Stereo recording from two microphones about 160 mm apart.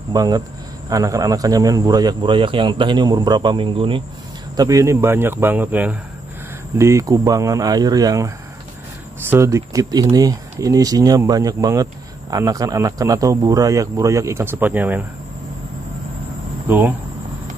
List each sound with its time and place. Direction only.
0.1 s speech: 25° right (ahead or behind)
4.6 s speech: 20° right (ahead or behind)
9.3 s speech: 20° right (ahead or behind)
16.6 s speech: 10° right (ahead or behind)